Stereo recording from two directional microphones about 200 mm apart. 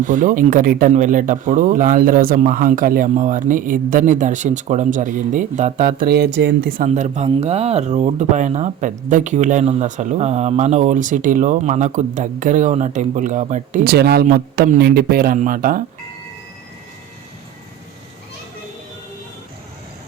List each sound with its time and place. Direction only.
0.0 s speech: 40° right (ahead or behind)
6.0 s speech: 50° right (ahead or behind)